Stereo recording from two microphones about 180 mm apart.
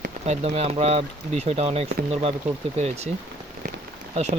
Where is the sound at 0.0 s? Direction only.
35° right (ahead or behind).